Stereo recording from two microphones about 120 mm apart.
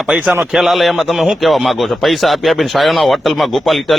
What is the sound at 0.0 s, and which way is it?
A man's voice, 5° right (ahead or behind).